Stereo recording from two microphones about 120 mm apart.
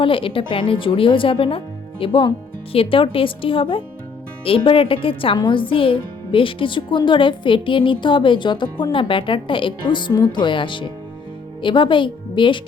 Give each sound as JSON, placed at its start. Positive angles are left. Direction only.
{"t": 0.0, "sound": "a woman's voice", "side_deg": 45}